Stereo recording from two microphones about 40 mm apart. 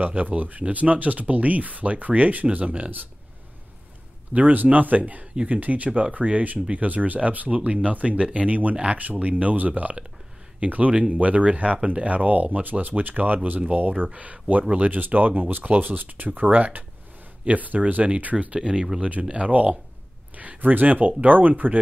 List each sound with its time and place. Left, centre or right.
0.0 s speech: right
4.3 s speech: right
18.0 s speech: right
18.6 s speech: right
19.3 s speech: right